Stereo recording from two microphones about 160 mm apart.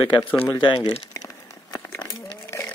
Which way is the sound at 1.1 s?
20° left (ahead or behind).